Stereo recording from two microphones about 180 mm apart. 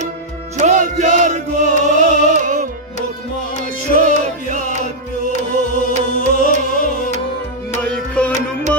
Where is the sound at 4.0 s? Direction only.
40° right (ahead or behind).